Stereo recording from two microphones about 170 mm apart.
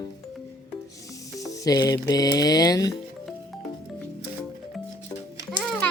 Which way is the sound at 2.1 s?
20° left (ahead or behind).